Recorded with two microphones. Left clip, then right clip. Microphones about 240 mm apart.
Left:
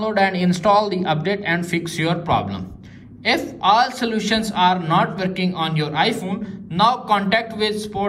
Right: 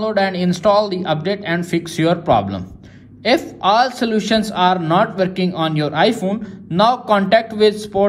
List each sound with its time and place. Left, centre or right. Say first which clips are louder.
0.0 s a man's voice: right 1 dB; centre